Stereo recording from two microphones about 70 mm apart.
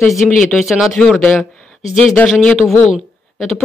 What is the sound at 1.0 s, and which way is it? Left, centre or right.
Speech, centre.